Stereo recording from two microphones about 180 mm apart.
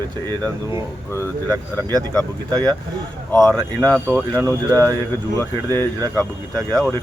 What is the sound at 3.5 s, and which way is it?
Speech, 10° left (ahead or behind).